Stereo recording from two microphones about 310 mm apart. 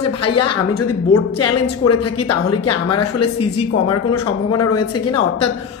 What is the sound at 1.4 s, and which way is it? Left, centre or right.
Speech, left.